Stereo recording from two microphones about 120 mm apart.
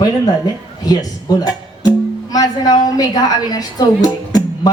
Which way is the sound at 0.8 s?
35° left (ahead or behind).